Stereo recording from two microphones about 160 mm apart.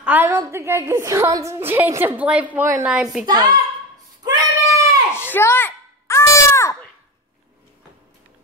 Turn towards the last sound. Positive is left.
turn(degrees=20)  # may be behind; listen again after turning